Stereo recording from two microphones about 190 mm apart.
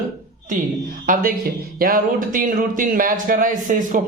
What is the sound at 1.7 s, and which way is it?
A man's voice, 50° right (ahead or behind).